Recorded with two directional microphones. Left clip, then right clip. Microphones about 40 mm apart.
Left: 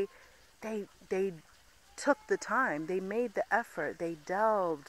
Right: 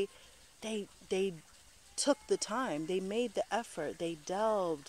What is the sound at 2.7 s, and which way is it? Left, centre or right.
Speech, centre.